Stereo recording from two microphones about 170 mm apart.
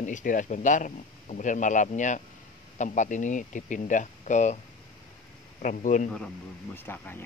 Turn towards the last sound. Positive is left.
turn(degrees=10)  # may be behind; listen again after turning